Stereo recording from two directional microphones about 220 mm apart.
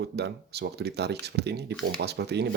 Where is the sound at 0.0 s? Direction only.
50° right (ahead or behind).